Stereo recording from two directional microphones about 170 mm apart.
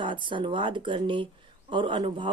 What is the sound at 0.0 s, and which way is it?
Speech, 30° right (ahead or behind).